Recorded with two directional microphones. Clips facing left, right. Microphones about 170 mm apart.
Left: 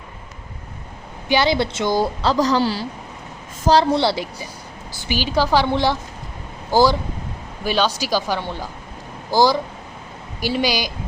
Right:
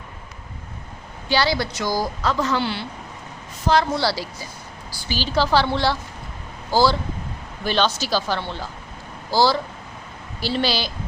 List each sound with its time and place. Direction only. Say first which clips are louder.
1.3 s a woman's voice: left 3 dB; 20° left (ahead or behind)
4.0 s a woman's voice: left 3 dB; 20° left (ahead or behind)